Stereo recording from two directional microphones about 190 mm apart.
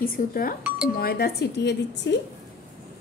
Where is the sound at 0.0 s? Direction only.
50° left (ahead or behind).